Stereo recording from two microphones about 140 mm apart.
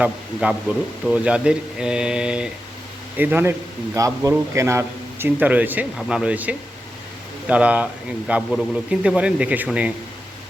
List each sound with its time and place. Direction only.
0.0 s a man's voice: 10° right (ahead or behind)